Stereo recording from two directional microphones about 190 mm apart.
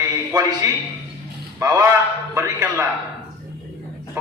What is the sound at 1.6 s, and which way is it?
A man's voice, 15° right (ahead or behind).